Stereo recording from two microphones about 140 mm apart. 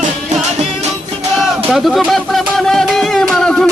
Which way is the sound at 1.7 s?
Centre (ahead or behind).